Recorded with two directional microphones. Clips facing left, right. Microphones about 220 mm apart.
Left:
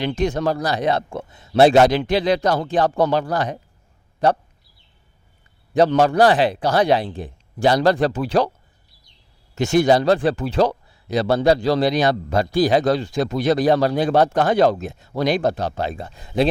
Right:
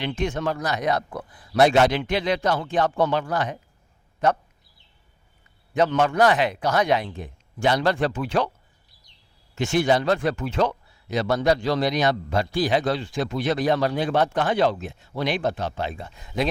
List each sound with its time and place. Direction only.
0.0 s speech: 40° left (ahead or behind)
5.7 s speech: 35° left (ahead or behind)
9.6 s speech: 40° left (ahead or behind)